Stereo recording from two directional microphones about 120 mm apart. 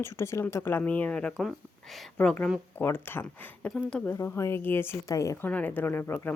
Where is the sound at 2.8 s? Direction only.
20° left (ahead or behind).